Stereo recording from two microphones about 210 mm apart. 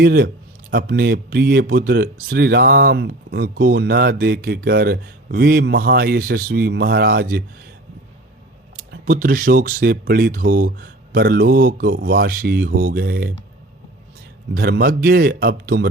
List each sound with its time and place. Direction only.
0.0 s speech: 45° right (ahead or behind)
8.7 s speech: 40° right (ahead or behind)
14.5 s speech: 45° right (ahead or behind)